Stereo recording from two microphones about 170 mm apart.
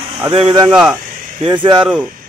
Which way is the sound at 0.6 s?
5° right (ahead or behind).